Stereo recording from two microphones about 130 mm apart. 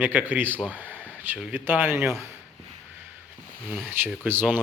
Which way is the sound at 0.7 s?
15° right (ahead or behind).